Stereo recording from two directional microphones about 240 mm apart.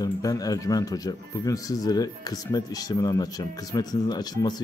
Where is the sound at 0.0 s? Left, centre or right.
Centre.